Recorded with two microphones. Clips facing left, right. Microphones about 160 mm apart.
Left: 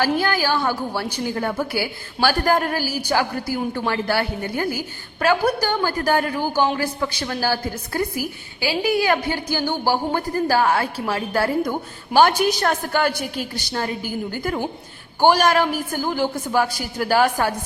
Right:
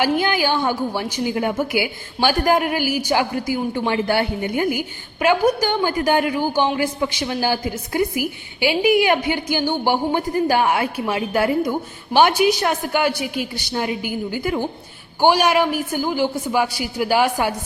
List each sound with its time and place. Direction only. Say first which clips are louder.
0.0 s a woman's voice: right 1 dB; 15° right (ahead or behind)